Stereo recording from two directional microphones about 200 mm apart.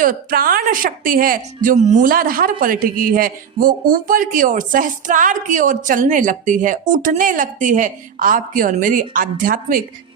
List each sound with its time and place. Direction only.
0.0 s speech: 45° right (ahead or behind)